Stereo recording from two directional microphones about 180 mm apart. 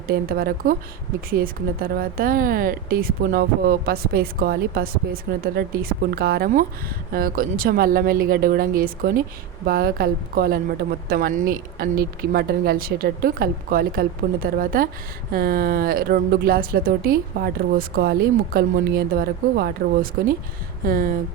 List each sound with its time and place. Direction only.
0.1 s a woman's voice: 55° right (ahead or behind)